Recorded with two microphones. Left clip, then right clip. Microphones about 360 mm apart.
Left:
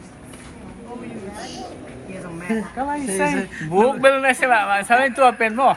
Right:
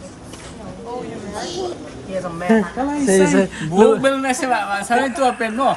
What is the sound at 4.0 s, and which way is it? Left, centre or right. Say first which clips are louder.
Speech: left 3 dB; centre.